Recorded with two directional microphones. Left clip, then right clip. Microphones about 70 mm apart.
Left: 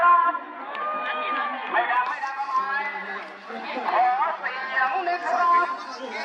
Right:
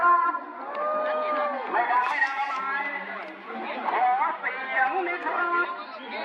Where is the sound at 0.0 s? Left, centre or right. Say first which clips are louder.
Left 3 dB; centre.